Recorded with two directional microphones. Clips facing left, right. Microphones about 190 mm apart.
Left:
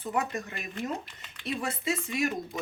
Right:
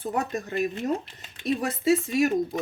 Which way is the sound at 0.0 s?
40° right (ahead or behind).